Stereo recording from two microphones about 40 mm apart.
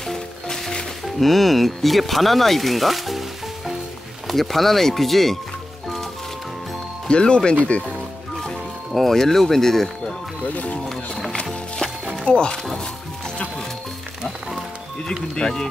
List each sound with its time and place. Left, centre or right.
0.0 s music: centre
1.0 s speech: centre
7.1 s speech: left
8.4 s music: centre
10.5 s speech: left
10.9 s music: centre
12.3 s speech: left
15.3 s speech: centre